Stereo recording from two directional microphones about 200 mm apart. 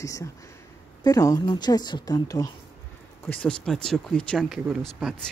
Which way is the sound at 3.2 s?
5° left (ahead or behind).